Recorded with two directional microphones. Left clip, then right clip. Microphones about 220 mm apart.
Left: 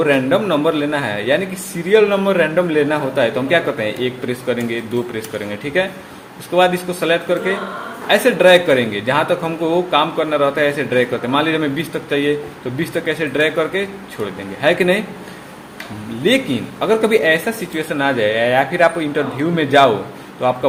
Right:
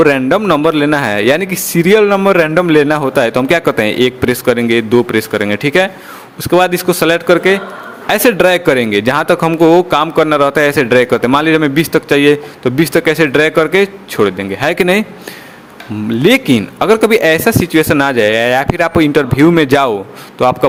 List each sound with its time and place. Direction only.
0.0 s speech: 50° right (ahead or behind)
16.2 s speech: 50° right (ahead or behind)